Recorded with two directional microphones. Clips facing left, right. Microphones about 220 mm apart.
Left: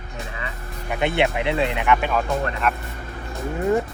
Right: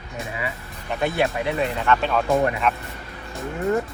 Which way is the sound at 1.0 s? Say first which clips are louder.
Left 1 dB; 25° left (ahead or behind).